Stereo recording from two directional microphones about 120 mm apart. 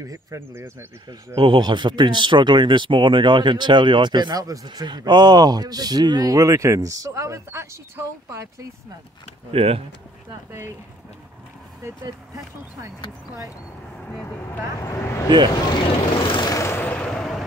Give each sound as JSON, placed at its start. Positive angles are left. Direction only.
{"t": 0.0, "sound": "speech", "side_deg": -25}
{"t": 1.3, "sound": "speech", "side_deg": -40}
{"t": 9.5, "sound": "speech", "side_deg": -55}
{"t": 14.8, "sound": "speech", "side_deg": 25}
{"t": 15.2, "sound": "speech", "side_deg": -40}
{"t": 16.3, "sound": "vehicle", "side_deg": 40}
{"t": 16.5, "sound": "vehicle", "side_deg": 20}